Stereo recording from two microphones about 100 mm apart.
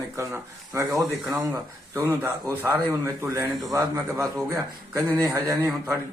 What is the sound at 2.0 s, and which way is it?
A man's voice, 25° right (ahead or behind).